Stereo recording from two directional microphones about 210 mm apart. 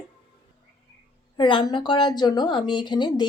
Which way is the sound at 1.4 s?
20° left (ahead or behind).